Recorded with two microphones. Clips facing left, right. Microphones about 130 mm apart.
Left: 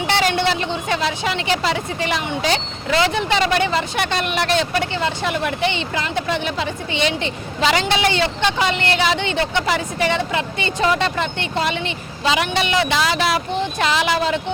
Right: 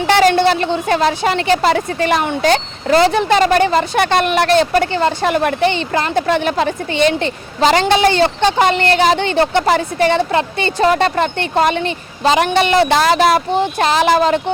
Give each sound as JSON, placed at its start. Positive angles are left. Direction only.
{"t": 0.1, "sound": "a woman's voice", "side_deg": -45}